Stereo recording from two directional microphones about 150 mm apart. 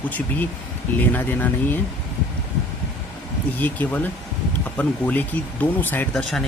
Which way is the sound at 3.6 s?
10° left (ahead or behind).